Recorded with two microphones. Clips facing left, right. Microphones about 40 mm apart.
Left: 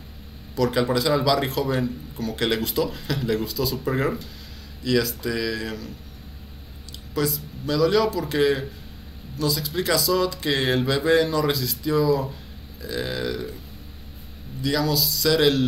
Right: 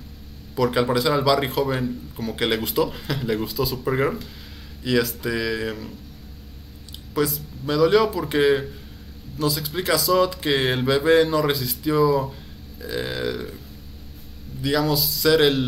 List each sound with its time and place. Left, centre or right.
0.6 s speech: centre
7.2 s speech: centre
14.6 s speech: centre